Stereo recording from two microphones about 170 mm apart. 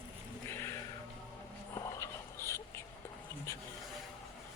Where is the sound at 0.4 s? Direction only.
15° left (ahead or behind).